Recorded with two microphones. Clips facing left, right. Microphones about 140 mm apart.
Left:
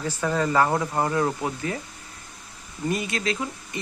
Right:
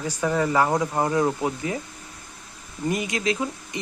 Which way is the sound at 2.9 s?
15° right (ahead or behind).